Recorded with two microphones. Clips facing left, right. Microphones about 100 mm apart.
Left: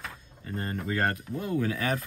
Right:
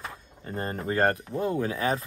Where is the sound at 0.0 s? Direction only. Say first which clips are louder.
Right 2 dB; 35° right (ahead or behind).